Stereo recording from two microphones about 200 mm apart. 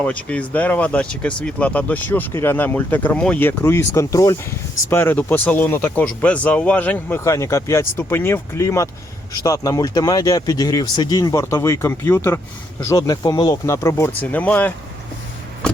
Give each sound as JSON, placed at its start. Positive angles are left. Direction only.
{"t": 0.0, "sound": "speech", "side_deg": 5}